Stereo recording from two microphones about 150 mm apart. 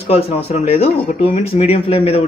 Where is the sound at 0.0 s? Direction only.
40° left (ahead or behind).